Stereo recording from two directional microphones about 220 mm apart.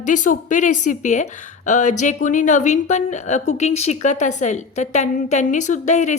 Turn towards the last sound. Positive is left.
turn(degrees=35)  # may be behind; listen again after turning